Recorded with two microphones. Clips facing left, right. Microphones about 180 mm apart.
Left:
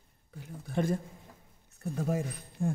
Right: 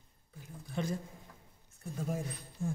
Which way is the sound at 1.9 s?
70° left (ahead or behind).